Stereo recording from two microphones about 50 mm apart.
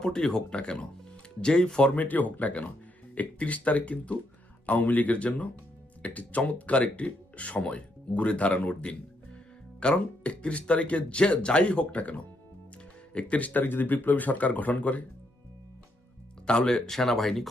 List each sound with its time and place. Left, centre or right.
0.0 s speech: centre
2.0 s speech: left
16.5 s speech: centre